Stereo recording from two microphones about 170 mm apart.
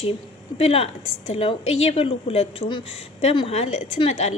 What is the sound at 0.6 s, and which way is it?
A woman's voice, 35° left (ahead or behind).